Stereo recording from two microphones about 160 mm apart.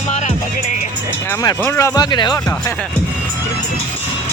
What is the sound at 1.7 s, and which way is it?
Speech, 20° left (ahead or behind).